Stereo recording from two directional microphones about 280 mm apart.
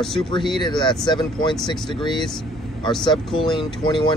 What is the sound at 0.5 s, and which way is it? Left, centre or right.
Speech, centre.